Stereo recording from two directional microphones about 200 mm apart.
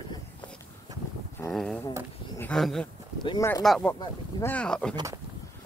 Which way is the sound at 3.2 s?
25° left (ahead or behind).